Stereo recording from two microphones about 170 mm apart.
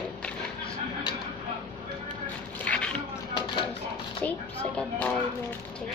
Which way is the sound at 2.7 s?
5° left (ahead or behind).